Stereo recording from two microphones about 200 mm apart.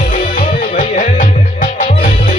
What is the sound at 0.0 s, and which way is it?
Music, 45° left (ahead or behind).